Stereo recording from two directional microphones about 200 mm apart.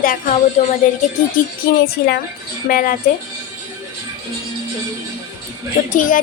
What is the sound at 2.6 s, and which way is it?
Speech, 45° left (ahead or behind).